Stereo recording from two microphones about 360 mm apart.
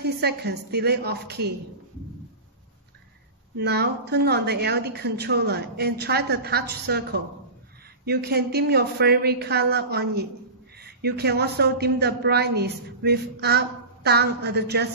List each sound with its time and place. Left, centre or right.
0.0 s a woman's voice: right
3.5 s a woman's voice: right